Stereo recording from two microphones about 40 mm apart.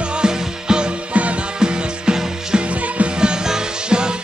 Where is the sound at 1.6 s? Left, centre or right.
Centre.